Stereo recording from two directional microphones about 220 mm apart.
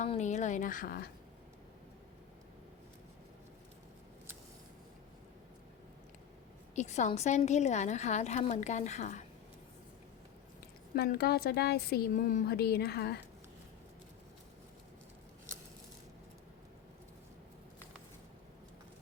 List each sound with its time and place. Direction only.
0.0 s a woman's voice: 30° left (ahead or behind)
6.7 s a woman's voice: 30° left (ahead or behind)
10.9 s a woman's voice: 45° left (ahead or behind)